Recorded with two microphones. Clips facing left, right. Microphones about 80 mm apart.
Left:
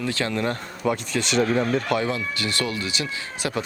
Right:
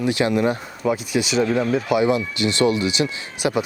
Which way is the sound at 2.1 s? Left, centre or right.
Centre.